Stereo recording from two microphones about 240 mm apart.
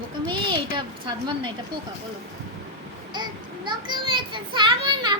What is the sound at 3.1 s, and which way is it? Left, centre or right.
Child singing, centre.